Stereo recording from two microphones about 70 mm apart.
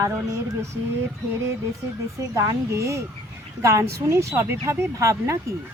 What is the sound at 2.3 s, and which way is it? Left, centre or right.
Speech, right.